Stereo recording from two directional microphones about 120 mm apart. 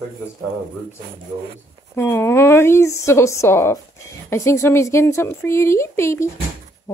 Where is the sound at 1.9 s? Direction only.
20° left (ahead or behind).